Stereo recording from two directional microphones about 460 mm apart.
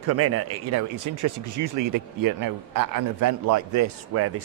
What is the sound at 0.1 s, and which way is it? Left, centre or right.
Speech, right.